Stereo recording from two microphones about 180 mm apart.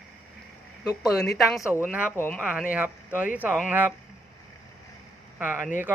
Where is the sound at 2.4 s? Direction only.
5° right (ahead or behind).